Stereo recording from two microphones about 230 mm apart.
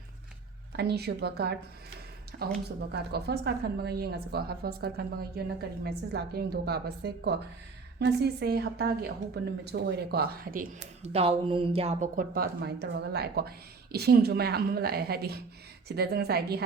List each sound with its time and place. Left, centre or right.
0.8 s a woman's voice: right